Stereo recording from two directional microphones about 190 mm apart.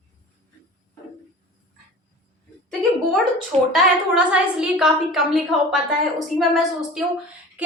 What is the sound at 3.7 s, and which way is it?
A woman's voice, 5° right (ahead or behind).